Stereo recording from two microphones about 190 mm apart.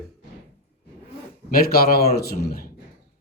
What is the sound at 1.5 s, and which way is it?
Speech, 50° left (ahead or behind).